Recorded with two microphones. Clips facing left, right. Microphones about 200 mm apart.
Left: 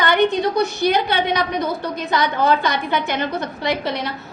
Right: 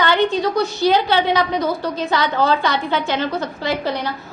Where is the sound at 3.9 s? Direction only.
70° left (ahead or behind).